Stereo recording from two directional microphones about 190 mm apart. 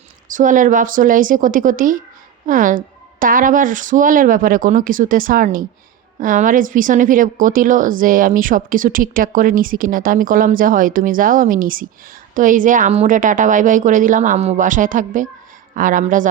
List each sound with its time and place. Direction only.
0.3 s speech: 45° right (ahead or behind)